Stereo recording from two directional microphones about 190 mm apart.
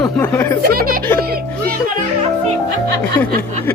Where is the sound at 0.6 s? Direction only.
50° right (ahead or behind).